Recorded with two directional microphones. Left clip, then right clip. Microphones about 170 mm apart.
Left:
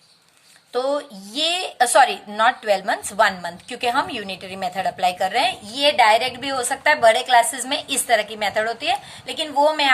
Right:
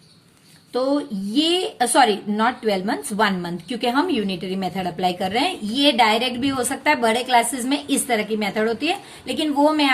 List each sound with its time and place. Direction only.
0.7 s a woman's voice: 35° left (ahead or behind)